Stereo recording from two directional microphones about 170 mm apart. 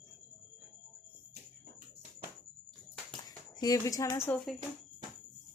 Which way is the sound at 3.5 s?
20° left (ahead or behind).